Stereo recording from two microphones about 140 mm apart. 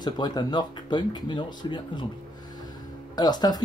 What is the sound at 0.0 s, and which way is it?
Speech, 30° left (ahead or behind).